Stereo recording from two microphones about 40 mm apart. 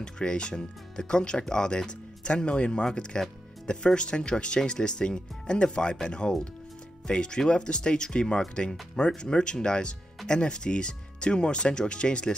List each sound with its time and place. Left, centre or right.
0.0 s speech: left